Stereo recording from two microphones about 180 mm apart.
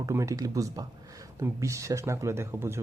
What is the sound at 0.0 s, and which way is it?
Speech, 15° right (ahead or behind).